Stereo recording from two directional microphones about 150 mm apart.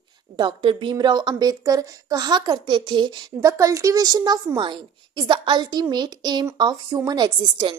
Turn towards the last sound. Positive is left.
turn(degrees=-30)  # may be behind; listen again after turning